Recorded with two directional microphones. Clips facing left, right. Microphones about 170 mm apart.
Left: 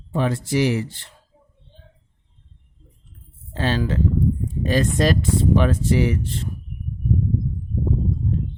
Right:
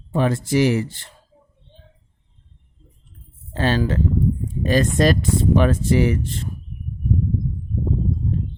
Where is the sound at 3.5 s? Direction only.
45° right (ahead or behind).